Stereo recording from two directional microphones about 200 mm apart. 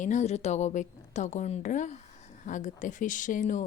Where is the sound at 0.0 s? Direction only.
35° left (ahead or behind).